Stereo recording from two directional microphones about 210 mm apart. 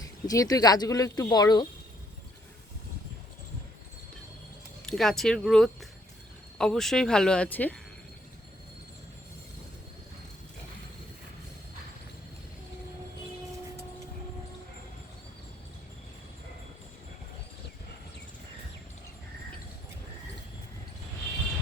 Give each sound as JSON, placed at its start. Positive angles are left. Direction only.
{"t": 0.0, "sound": "speech", "side_deg": 15}
{"t": 4.9, "sound": "speech", "side_deg": 0}